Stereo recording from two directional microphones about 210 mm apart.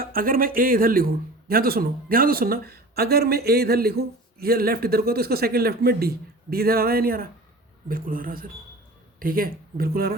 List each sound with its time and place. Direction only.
0.0 s a man's voice: 45° right (ahead or behind)